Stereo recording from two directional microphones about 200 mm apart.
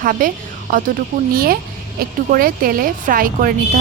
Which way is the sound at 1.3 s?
45° right (ahead or behind).